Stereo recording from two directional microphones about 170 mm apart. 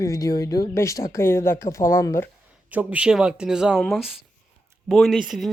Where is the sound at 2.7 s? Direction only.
5° right (ahead or behind).